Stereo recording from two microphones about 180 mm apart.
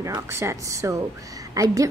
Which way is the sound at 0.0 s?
15° right (ahead or behind).